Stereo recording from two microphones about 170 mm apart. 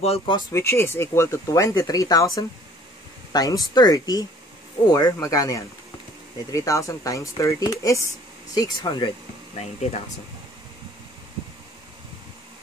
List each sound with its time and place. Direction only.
0.0 s speech: 35° left (ahead or behind)
0.5 s speech: 15° left (ahead or behind)
9.6 s speech: 40° left (ahead or behind)